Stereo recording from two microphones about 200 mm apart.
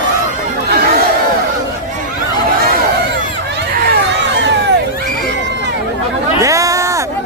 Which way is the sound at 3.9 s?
60° right (ahead or behind).